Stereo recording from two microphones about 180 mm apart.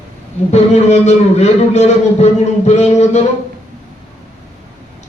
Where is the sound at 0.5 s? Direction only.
40° left (ahead or behind).